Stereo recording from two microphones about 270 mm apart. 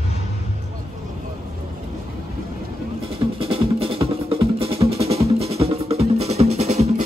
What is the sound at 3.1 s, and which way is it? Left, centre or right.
Music, right.